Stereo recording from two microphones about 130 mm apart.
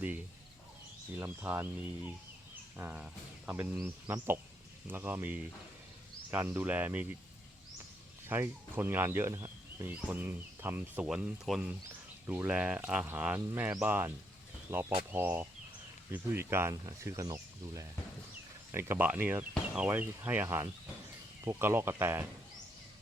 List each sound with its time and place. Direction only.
1.1 s speech: 15° right (ahead or behind)
2.7 s speech: 10° right (ahead or behind)
4.0 s speech: 25° right (ahead or behind)
8.3 s speech: 15° right (ahead or behind)